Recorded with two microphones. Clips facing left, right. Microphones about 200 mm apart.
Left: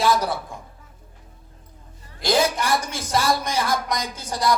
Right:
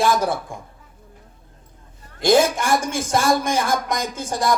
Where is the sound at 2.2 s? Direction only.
50° right (ahead or behind).